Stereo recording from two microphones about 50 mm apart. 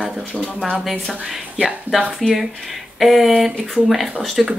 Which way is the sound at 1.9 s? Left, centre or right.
Right.